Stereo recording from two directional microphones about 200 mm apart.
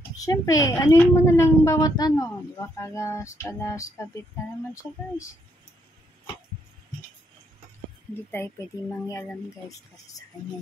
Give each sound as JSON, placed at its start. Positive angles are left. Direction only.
{"t": 0.2, "sound": "a woman's voice", "side_deg": 15}
{"t": 8.4, "sound": "a woman's voice", "side_deg": 10}